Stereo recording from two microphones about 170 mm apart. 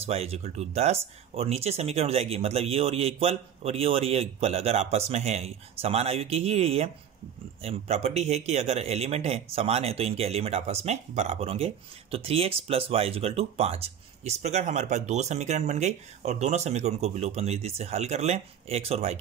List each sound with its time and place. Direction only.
0.0 s speech: 35° right (ahead or behind)